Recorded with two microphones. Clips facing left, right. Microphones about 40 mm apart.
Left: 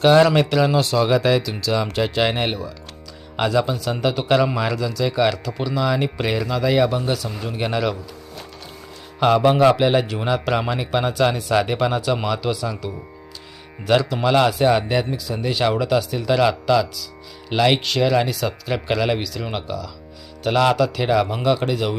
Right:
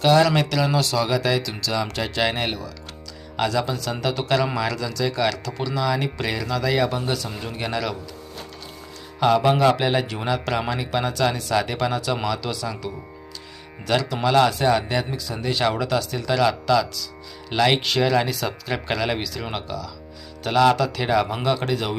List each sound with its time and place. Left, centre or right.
0.0 s a man's voice: left
9.2 s a man's voice: centre